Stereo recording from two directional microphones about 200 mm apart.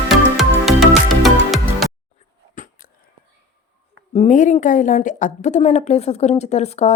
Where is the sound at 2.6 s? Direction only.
40° left (ahead or behind).